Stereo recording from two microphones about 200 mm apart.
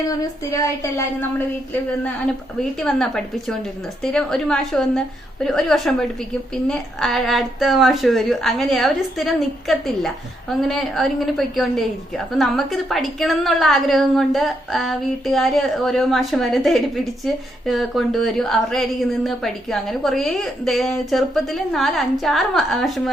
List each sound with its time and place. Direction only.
0.5 s a woman's voice: 15° left (ahead or behind)
2.8 s a woman's voice: 5° left (ahead or behind)